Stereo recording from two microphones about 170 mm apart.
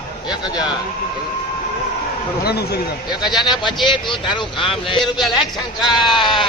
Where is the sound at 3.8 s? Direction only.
25° left (ahead or behind).